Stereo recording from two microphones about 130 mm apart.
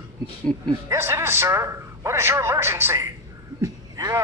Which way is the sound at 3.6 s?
25° right (ahead or behind).